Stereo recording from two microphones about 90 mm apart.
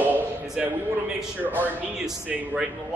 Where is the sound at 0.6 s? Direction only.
5° right (ahead or behind).